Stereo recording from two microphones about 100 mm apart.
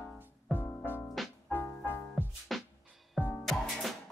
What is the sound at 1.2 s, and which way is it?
Music, centre (ahead or behind).